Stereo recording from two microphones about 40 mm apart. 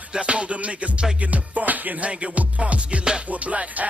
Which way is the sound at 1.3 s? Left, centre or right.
Right.